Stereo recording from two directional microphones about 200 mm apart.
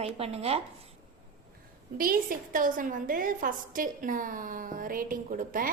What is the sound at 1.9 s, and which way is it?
A woman's voice, 45° right (ahead or behind).